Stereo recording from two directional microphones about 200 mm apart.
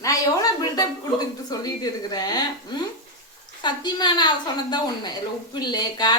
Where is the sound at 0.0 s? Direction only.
15° left (ahead or behind).